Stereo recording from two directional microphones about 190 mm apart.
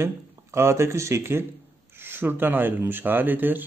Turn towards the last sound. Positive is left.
turn(degrees=-10)  # may be behind; listen again after turning